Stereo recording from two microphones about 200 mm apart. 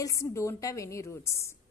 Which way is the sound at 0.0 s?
15° left (ahead or behind).